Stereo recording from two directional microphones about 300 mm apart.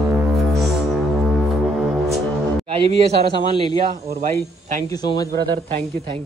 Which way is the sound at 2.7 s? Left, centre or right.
Centre.